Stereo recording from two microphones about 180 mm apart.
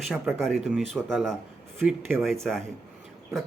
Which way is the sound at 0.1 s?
Centre (ahead or behind).